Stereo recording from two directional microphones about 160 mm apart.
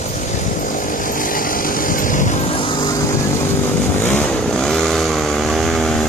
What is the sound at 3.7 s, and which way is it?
Vehicle, 10° left (ahead or behind).